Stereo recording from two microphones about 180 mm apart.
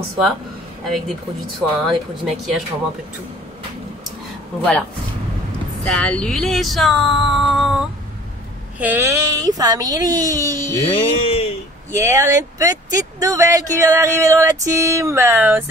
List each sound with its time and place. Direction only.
0.8 s speech: centre (ahead or behind)
5.9 s speech: 5° left (ahead or behind)
8.8 s speech: 15° right (ahead or behind)
11.0 s speech: 30° left (ahead or behind)
11.9 s speech: 15° right (ahead or behind)